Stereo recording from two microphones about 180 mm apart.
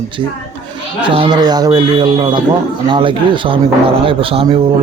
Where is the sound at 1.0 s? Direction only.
30° right (ahead or behind).